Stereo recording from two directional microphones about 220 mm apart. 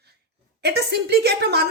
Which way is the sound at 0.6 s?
50° right (ahead or behind).